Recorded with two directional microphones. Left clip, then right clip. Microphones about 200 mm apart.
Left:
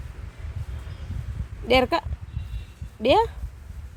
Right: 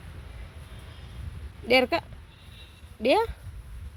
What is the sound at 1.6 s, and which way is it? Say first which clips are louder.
A woman's voice: left 2 dB; 10° left (ahead or behind).